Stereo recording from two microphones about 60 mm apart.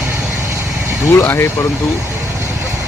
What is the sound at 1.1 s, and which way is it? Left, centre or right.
Speech, left.